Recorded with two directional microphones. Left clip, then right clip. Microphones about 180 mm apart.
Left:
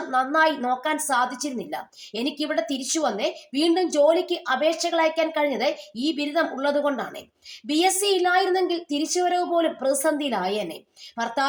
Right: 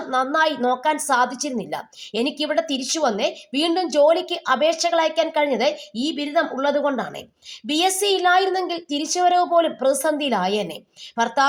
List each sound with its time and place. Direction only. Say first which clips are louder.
0.1 s a woman's voice: right 1 dB; 20° right (ahead or behind)